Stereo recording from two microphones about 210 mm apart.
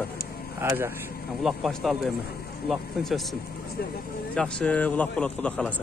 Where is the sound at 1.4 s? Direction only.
Centre (ahead or behind).